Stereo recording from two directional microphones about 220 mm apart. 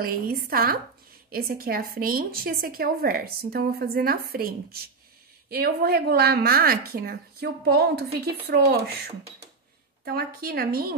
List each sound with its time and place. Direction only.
0.0 s a woman's voice: 40° right (ahead or behind)